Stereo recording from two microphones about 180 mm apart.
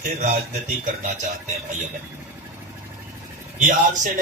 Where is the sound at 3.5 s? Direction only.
45° right (ahead or behind).